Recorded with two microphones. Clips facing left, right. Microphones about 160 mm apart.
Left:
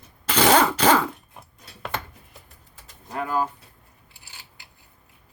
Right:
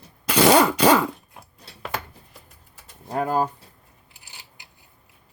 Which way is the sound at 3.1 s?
40° right (ahead or behind).